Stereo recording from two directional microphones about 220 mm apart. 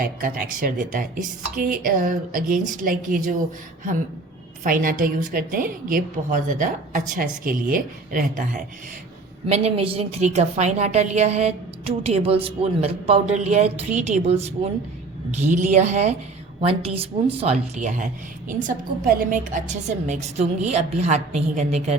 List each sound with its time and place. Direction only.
0.0 s a woman's voice: 40° right (ahead or behind)
4.6 s a woman's voice: 40° right (ahead or behind)
9.5 s a woman's voice: 25° right (ahead or behind)